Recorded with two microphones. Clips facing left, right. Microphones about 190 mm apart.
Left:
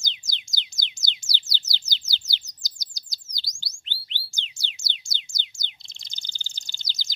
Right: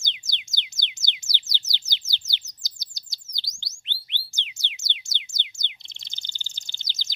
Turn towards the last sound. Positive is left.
turn(degrees=-20)  # may be behind; listen again after turning